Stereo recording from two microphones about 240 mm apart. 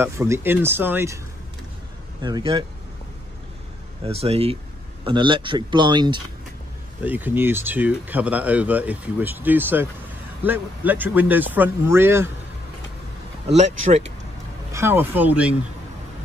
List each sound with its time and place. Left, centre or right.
0.0 s speech: centre
2.2 s speech: centre
4.0 s speech: right
7.0 s speech: centre
14.7 s speech: centre